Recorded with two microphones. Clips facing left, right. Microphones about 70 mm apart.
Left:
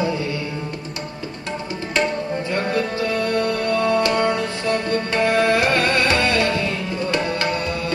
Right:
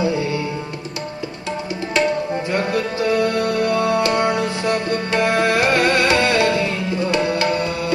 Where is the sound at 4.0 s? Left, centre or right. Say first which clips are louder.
Right 1 dB; centre.